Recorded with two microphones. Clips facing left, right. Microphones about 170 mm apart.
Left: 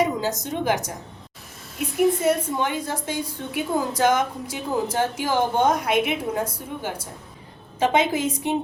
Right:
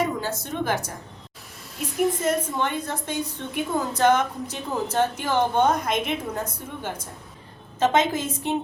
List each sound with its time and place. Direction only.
0.0 s a woman's voice: 15° left (ahead or behind)
2.2 s a woman's voice: 10° left (ahead or behind)